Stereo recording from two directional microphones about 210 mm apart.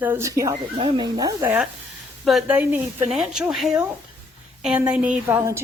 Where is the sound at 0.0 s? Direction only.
10° right (ahead or behind).